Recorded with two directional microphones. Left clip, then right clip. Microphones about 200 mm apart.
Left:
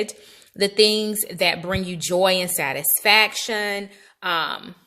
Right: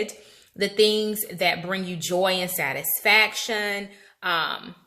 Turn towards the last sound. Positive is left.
turn(degrees=40)  # may be behind; listen again after turning